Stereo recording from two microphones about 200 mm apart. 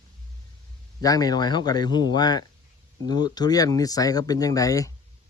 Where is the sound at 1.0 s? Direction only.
20° left (ahead or behind).